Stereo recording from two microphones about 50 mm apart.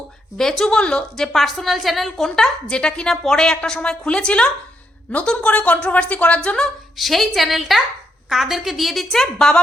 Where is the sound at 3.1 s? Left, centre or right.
Centre; by 6.6 s left.